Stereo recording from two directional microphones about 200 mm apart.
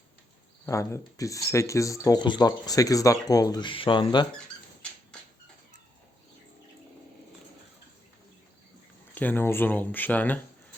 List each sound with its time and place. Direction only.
0.6 s speech: 15° left (ahead or behind)
9.1 s speech: 10° left (ahead or behind)